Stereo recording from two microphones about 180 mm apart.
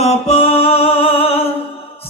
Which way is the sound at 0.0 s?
35° left (ahead or behind).